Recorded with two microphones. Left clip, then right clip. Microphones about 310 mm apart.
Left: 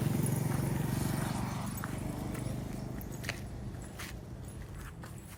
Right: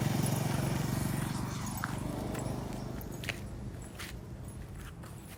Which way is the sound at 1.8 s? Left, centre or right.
Centre.